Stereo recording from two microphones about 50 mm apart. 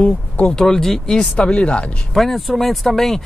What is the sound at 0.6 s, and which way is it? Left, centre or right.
Speech, centre.